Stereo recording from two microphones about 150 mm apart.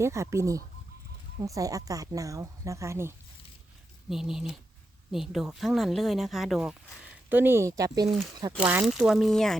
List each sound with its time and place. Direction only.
0.0 s speech: 20° right (ahead or behind)
4.1 s speech: 5° right (ahead or behind); by 8.6 s 25° right (ahead or behind)
8.8 s speech: 5° right (ahead or behind)